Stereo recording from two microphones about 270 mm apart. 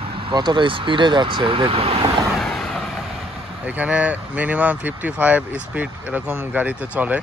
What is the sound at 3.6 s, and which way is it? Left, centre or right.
Speech, centre.